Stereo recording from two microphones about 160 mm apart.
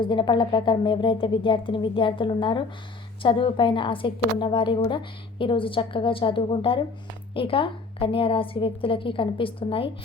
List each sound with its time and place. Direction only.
0.0 s a woman's voice: 30° left (ahead or behind)